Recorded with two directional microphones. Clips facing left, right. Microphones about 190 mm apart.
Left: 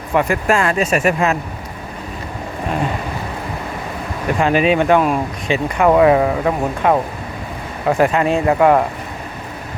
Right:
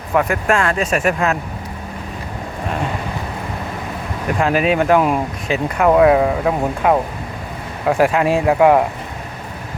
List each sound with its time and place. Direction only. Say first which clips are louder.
0.1 s speech: left 1 dB; centre (ahead or behind)
4.4 s speech: left 1 dB; centre (ahead or behind)
4.9 s speech: even; 15° right (ahead or behind)
5.5 s speech: left 1 dB; centre (ahead or behind)